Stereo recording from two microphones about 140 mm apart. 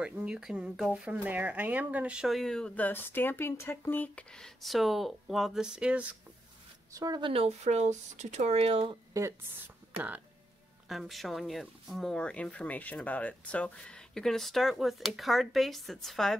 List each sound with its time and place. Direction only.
0.0 s speech: 10° right (ahead or behind)
6.9 s speech: 25° right (ahead or behind); by 8.9 s 45° right (ahead or behind)
9.1 s a woman's voice: 25° right (ahead or behind)
9.9 s speech: 10° right (ahead or behind)
10.9 s speech: centre (ahead or behind)